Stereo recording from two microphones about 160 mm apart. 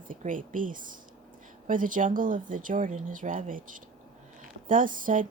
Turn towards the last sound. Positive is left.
turn(degrees=-55)  # may be behind; listen again after turning